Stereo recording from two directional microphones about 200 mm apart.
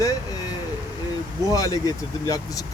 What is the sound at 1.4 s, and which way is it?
Speech, 15° left (ahead or behind).